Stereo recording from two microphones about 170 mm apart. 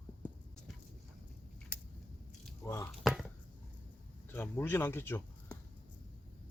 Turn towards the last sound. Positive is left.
turn(degrees=10)  # may be behind; listen again after turning